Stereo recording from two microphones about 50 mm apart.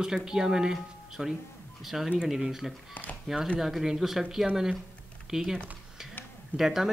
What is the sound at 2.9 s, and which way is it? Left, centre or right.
Speech, left.